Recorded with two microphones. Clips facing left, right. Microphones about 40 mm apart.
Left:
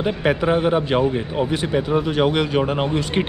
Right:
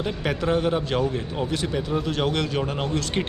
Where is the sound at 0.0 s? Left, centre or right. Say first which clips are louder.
Left 6 dB; left.